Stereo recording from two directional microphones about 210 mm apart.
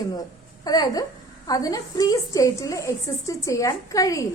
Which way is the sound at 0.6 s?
20° left (ahead or behind).